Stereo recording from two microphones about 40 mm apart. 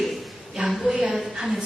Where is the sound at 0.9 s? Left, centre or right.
Centre.